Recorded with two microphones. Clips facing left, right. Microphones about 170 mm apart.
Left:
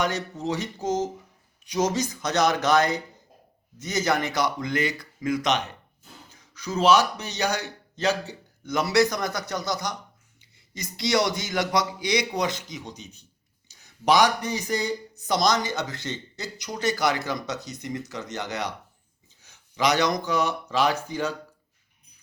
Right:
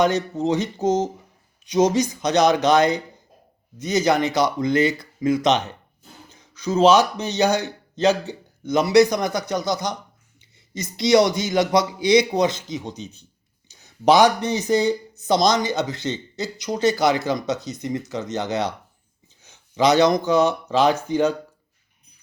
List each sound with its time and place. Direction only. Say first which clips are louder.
0.0 s speech: right 7 dB; 20° right (ahead or behind)
13.7 s a sound: right 5 dB; 25° right (ahead or behind)
14.4 s speech: right 8 dB; 20° right (ahead or behind)